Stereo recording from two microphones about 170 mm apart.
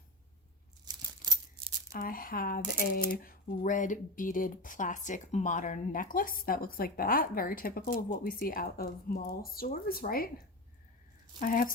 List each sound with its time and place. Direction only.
0.9 s tearing: 25° right (ahead or behind)
1.9 s speech: 60° left (ahead or behind)
11.3 s speech: 55° left (ahead or behind)